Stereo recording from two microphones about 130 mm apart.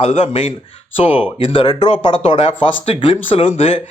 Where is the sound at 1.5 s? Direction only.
35° left (ahead or behind).